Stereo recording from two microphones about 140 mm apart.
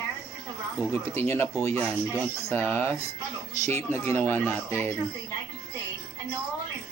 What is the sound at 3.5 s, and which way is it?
Speech, 50° right (ahead or behind).